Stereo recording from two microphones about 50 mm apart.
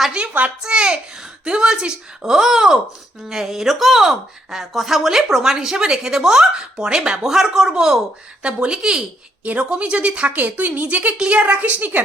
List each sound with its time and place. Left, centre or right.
0.1 s a woman's voice: right
9.4 s a woman's voice: right
10.3 s a woman's voice: right